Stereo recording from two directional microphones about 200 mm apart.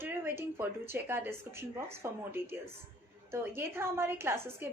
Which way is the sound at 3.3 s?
10° right (ahead or behind).